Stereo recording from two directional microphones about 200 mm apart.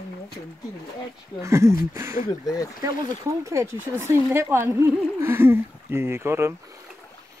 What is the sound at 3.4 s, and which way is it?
Speech, 15° right (ahead or behind).